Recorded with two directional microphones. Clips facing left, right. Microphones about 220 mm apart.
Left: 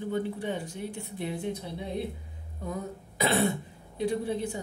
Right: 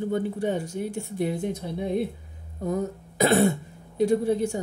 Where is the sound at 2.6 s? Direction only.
45° right (ahead or behind).